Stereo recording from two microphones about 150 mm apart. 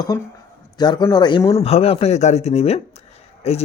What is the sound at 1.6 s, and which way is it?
A man's voice, 40° left (ahead or behind).